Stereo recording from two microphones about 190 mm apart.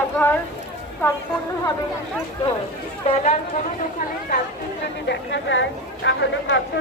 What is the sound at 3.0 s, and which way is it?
Speech, 35° left (ahead or behind).